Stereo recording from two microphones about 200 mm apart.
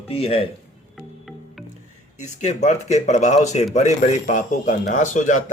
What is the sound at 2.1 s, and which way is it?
Speech, 35° left (ahead or behind).